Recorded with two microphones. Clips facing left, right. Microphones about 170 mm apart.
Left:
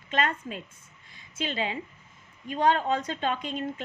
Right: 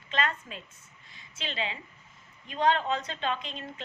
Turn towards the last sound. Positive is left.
turn(degrees=45)  # may be behind; listen again after turning